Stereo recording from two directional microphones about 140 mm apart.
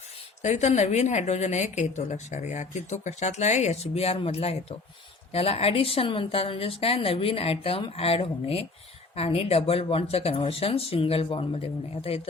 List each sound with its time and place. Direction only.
0.4 s a woman's voice: 55° left (ahead or behind)